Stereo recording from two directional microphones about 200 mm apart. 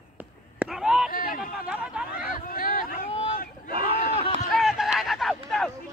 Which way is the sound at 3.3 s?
45° left (ahead or behind).